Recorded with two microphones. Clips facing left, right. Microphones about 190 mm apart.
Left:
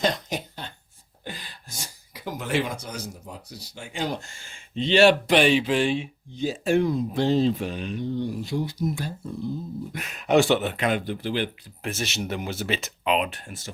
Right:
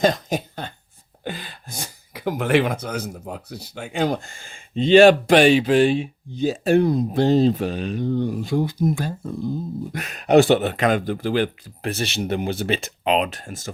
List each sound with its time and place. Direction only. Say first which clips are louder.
0.0 s speech: right 6 dB; 50° right (ahead or behind)
9.9 s speech: right 5 dB; 65° right (ahead or behind)
10.5 s speech: right 5 dB; 40° right (ahead or behind)